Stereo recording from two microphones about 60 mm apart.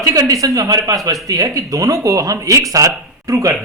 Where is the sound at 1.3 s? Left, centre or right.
Right.